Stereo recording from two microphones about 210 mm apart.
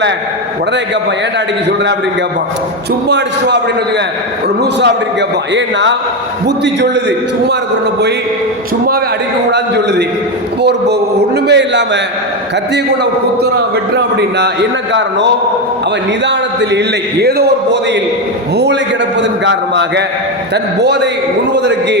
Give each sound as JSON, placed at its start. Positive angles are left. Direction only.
{"t": 3.1, "sound": "a man's voice", "side_deg": -55}
{"t": 4.6, "sound": "a man's voice", "side_deg": -55}
{"t": 9.5, "sound": "a man's voice", "side_deg": -55}
{"t": 13.9, "sound": "a man's voice", "side_deg": -55}